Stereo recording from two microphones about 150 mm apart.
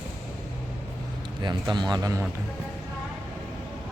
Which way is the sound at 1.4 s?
30° right (ahead or behind).